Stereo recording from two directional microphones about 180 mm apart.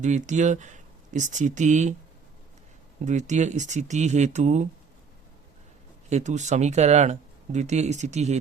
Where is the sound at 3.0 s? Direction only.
40° right (ahead or behind).